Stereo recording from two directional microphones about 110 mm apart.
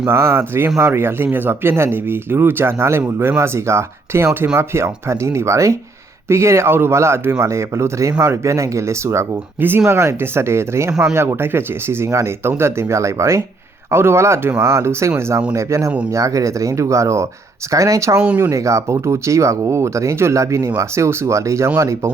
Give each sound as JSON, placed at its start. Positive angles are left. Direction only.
{"t": 0.0, "sound": "speech", "side_deg": -20}
{"t": 18.2, "sound": "speech", "side_deg": -15}
{"t": 18.5, "sound": "speech", "side_deg": -25}